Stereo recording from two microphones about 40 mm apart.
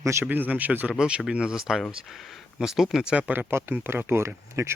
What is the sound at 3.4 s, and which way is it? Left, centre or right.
Speech, right.